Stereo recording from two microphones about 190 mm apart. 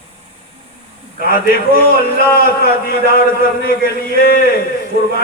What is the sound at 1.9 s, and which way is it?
Speech, 50° left (ahead or behind).